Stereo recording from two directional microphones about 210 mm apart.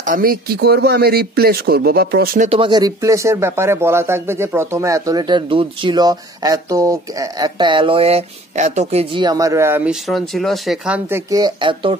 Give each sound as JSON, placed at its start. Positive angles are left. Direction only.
{"t": 0.0, "sound": "speech", "side_deg": -40}
{"t": 2.6, "sound": "speech", "side_deg": -20}